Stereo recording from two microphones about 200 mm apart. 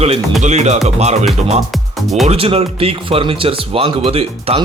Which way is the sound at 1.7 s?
Centre (ahead or behind).